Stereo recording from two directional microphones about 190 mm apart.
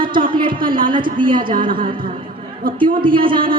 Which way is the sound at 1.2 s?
25° right (ahead or behind).